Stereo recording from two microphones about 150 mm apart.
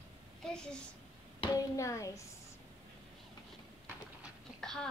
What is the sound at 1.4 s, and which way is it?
Speech, 25° left (ahead or behind).